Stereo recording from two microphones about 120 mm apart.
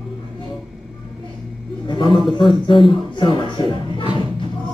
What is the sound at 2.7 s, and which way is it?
Speech, 45° left (ahead or behind).